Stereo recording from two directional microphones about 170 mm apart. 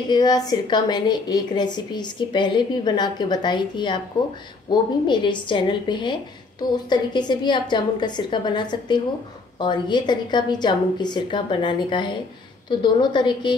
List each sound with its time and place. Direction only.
0.1 s a woman's voice: 25° left (ahead or behind)